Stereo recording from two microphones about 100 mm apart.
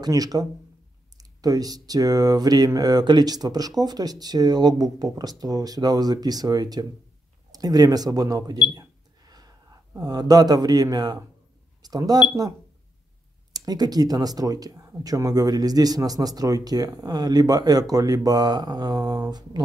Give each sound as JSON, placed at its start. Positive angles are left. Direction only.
{"t": 0.0, "sound": "speech", "side_deg": -40}
{"t": 8.7, "sound": "cash register", "side_deg": -40}
{"t": 10.0, "sound": "speech", "side_deg": -40}